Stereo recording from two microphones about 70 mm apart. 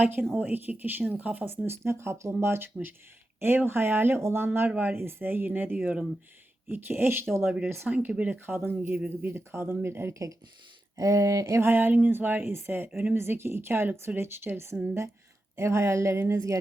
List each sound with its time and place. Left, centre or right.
0.3 s speech: right
1.6 s speech: right
7.9 s speech: centre; by 10.2 s right
10.9 s speech: right
11.6 s a woman's voice: right